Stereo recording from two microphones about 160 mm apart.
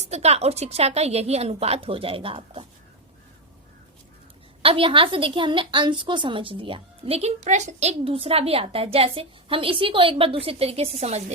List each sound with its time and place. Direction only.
0.1 s a woman's voice: 40° right (ahead or behind)
4.6 s a woman's voice: 35° right (ahead or behind)